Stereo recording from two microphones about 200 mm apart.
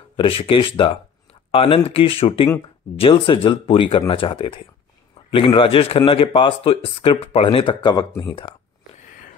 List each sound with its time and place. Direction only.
0.1 s speech: 25° left (ahead or behind)